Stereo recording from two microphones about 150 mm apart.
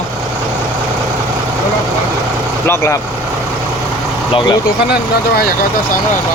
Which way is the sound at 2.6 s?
15° left (ahead or behind).